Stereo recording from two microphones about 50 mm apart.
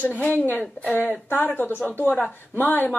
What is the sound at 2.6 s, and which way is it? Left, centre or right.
Speech, left.